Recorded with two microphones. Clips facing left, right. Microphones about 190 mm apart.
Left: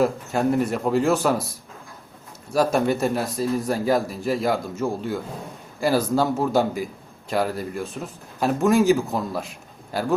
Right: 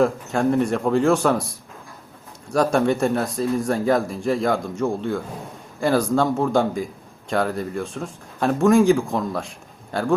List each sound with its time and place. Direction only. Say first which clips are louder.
0.0 s a man's voice: right 2 dB; 5° left (ahead or behind)
2.5 s a man's voice: right 1 dB; 5° left (ahead or behind)